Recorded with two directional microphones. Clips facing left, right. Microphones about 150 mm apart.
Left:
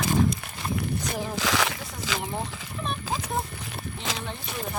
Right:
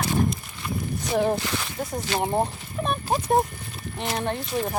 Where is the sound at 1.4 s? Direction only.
90° left.